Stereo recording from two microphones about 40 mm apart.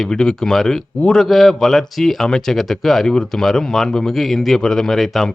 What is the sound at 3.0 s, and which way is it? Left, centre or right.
Speech, centre.